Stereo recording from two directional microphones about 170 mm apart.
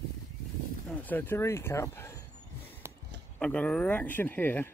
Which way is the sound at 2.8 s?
15° right (ahead or behind).